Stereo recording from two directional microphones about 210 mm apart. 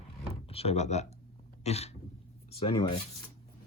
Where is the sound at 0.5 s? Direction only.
30° left (ahead or behind).